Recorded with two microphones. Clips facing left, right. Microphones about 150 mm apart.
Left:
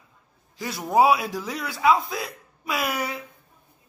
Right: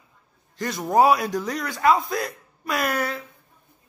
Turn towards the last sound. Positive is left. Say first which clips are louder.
# right 2 dB
turn(degrees=15)  # may be behind; listen again after turning